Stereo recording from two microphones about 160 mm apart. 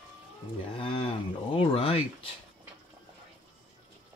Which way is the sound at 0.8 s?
35° left (ahead or behind).